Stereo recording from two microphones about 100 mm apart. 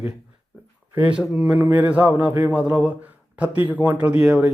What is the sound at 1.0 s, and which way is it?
Speech, 10° right (ahead or behind).